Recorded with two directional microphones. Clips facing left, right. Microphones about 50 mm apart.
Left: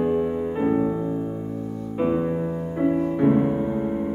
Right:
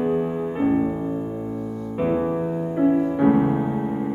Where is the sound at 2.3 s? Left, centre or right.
Right.